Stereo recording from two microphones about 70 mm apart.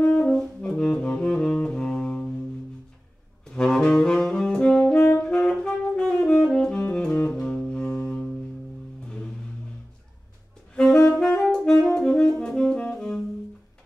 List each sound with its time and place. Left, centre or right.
0.0 s brass instrument: left
0.3 s saxophone: centre
3.4 s saxophone: centre
5.2 s music: centre
6.2 s saxophone: centre
7.3 s music: centre
10.7 s saxophone: centre